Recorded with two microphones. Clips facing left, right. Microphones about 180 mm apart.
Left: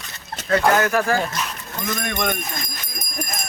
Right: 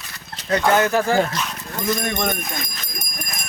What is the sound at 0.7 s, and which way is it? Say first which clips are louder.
Speech: right 2 dB; 25° right (ahead or behind).